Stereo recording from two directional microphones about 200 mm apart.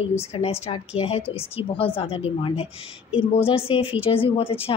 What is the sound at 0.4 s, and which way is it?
Speech, 30° left (ahead or behind).